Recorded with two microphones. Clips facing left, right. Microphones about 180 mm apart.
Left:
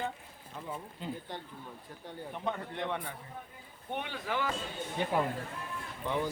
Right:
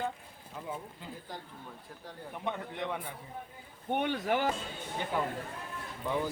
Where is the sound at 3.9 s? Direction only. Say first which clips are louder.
Right 6 dB; 45° right (ahead or behind).